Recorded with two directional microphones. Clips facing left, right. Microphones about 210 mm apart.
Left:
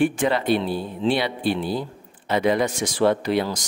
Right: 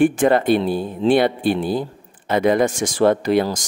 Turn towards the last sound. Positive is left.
turn(degrees=-45)  # may be behind; listen again after turning